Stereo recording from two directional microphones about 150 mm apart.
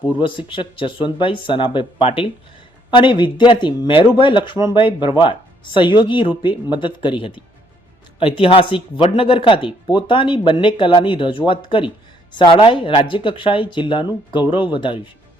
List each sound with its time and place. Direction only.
0.2 s speech: 35° left (ahead or behind)